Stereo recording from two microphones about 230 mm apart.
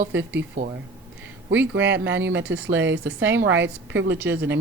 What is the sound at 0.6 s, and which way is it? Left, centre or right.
Speech, right.